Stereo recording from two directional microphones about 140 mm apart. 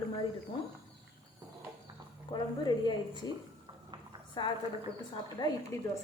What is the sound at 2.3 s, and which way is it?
Speech, 30° left (ahead or behind).